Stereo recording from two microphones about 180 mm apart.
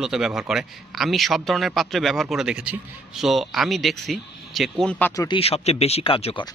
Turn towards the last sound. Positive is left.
turn(degrees=30)  # may be behind; listen again after turning